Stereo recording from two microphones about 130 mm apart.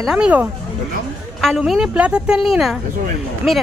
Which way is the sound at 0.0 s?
5° right (ahead or behind).